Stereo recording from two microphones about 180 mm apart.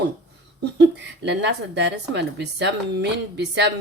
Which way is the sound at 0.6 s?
75° right (ahead or behind).